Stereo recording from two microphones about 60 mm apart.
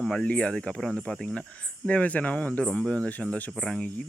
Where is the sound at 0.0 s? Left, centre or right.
Centre.